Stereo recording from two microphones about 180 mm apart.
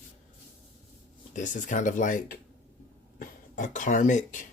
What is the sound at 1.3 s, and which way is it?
Speech, 45° left (ahead or behind).